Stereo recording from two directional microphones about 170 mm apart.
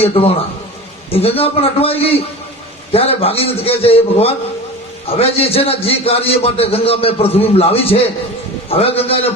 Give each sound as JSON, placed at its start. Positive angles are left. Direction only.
{"t": 0.0, "sound": "a man's voice", "side_deg": 35}